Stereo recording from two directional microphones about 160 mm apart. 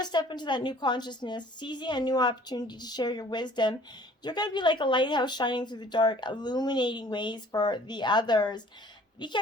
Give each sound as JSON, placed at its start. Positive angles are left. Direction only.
{"t": 0.0, "sound": "speech", "side_deg": 25}